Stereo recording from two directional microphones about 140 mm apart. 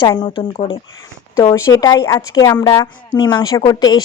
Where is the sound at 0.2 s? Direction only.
40° left (ahead or behind).